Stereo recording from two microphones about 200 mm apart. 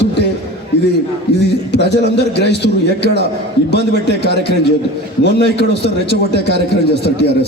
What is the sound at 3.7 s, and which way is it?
A man's voice, 55° left (ahead or behind).